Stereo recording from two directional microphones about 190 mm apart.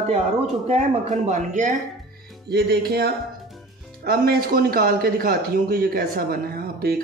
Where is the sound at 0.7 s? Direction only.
35° right (ahead or behind).